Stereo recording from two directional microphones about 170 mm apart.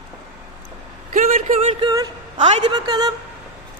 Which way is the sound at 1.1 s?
50° right (ahead or behind).